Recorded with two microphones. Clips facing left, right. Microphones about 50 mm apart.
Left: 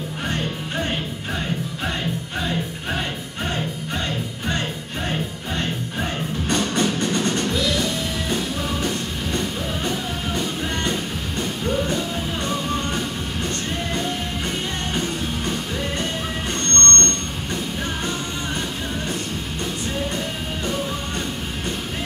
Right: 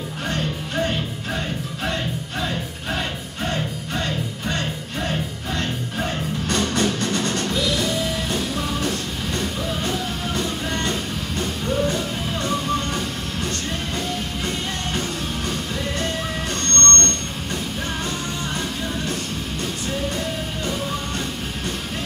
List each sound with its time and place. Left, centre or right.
6.5 s music: left
16.4 s music: left